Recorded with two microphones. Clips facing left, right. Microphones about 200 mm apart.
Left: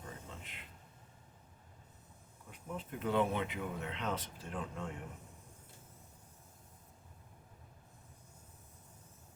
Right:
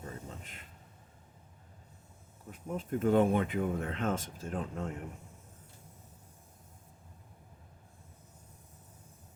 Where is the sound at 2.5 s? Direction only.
45° right (ahead or behind).